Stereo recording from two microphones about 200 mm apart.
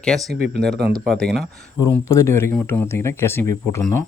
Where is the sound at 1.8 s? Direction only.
15° left (ahead or behind).